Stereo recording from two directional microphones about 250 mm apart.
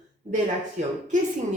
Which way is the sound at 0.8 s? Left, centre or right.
Right.